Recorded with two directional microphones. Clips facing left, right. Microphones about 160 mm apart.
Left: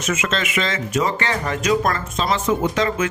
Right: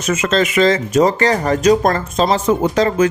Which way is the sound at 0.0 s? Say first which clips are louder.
Right 7 dB; 40° right (ahead or behind).